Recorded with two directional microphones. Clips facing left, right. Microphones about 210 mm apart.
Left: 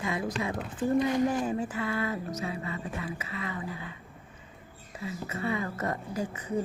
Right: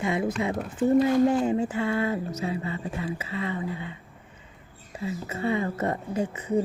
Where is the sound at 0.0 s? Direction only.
25° right (ahead or behind).